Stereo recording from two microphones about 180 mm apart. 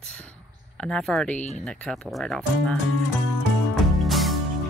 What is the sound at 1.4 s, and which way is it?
Speech, 40° left (ahead or behind).